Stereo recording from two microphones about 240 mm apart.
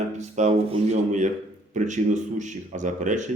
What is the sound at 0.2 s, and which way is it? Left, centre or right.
Speech, right.